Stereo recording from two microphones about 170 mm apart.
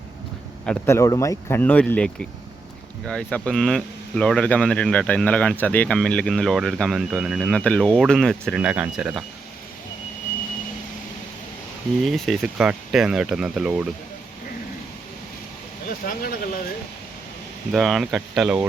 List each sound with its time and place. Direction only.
0.9 s speech: 20° left (ahead or behind)
3.1 s speech: 5° left (ahead or behind)
12.0 s speech: centre (ahead or behind)
16.0 s speech: 60° left (ahead or behind)
17.7 s speech: centre (ahead or behind)